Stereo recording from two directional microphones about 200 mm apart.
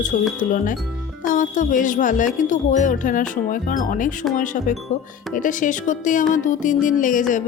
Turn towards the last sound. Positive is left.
turn(degrees=40)  # may be behind; listen again after turning